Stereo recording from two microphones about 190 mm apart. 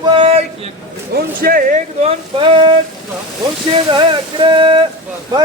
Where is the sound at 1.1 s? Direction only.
50° right (ahead or behind).